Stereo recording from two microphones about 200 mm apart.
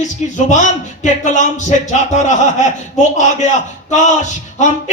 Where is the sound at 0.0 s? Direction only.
35° left (ahead or behind).